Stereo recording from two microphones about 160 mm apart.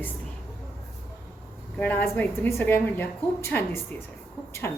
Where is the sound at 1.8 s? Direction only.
10° left (ahead or behind).